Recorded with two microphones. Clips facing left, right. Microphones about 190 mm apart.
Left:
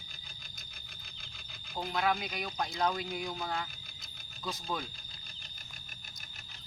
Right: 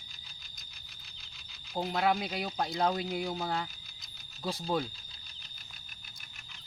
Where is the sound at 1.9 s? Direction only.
30° right (ahead or behind).